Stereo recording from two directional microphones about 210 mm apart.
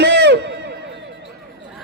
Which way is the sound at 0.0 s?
55° right (ahead or behind).